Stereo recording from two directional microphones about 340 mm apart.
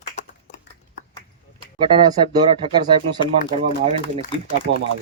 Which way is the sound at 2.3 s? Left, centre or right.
Centre.